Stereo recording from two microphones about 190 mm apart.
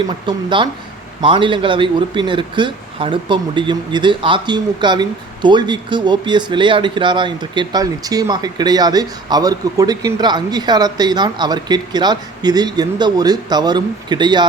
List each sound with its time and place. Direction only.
0.3 s speech: 25° right (ahead or behind)